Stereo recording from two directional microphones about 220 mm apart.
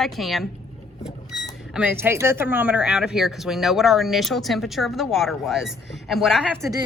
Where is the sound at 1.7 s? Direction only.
10° right (ahead or behind).